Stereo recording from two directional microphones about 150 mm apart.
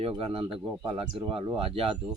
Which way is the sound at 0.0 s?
40° right (ahead or behind).